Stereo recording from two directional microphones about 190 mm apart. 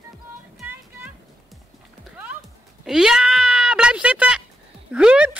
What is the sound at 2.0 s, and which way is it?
Sheep, centre (ahead or behind).